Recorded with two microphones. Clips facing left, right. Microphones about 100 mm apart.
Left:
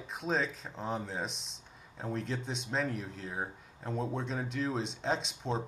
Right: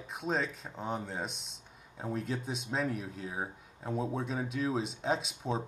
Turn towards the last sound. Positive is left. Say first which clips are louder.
# right 1 dB
turn(degrees=-5)  # may be behind; listen again after turning